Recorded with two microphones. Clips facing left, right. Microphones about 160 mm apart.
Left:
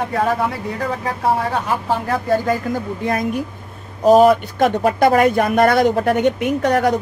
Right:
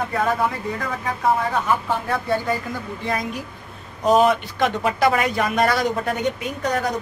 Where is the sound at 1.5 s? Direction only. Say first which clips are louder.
Left 2 dB; 35° left (ahead or behind); by 6.9 s 65° left (ahead or behind).